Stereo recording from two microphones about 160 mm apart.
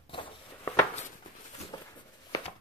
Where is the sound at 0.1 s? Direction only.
30° left (ahead or behind).